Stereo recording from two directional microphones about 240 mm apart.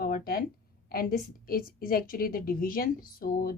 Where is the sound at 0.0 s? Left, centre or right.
Left.